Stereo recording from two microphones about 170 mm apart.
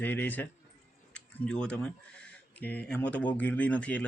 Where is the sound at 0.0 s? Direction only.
10° left (ahead or behind).